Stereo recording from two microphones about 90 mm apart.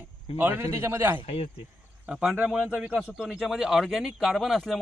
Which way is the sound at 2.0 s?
10° right (ahead or behind).